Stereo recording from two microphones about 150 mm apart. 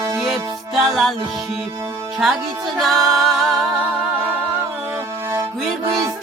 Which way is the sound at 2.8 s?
Centre (ahead or behind).